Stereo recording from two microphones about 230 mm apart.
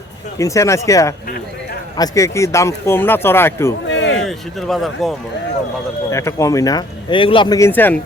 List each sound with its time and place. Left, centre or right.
0.3 s speech: centre
3.8 s a sound: left
4.3 s speech: centre
6.1 s speech: centre